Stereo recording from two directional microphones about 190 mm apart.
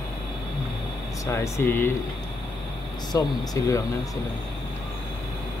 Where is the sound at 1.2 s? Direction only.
15° left (ahead or behind).